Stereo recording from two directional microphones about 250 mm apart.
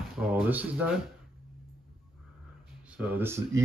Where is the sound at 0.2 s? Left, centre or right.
Centre.